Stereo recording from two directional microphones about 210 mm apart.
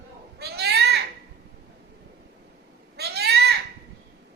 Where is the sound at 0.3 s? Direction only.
50° right (ahead or behind).